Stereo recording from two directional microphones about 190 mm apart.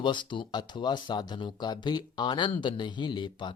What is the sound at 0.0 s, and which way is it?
Speech, 25° left (ahead or behind).